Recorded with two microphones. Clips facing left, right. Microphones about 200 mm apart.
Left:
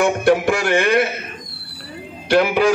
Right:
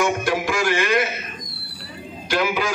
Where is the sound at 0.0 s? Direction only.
60° left (ahead or behind).